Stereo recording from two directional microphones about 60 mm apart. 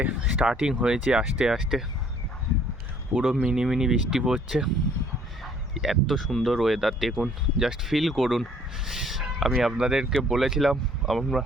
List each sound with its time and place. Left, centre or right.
0.0 s speech: centre
3.2 s speech: centre